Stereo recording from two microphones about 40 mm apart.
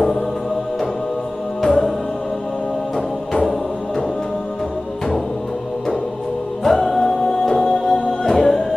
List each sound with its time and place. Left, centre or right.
1.6 s music: centre
6.6 s music: centre